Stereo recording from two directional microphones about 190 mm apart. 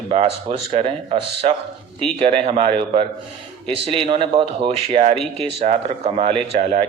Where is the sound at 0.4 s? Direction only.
30° right (ahead or behind).